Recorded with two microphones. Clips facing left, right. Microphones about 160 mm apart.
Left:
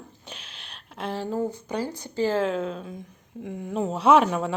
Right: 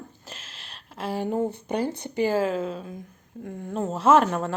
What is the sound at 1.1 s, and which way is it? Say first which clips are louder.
Speech: right 2 dB; 15° right (ahead or behind).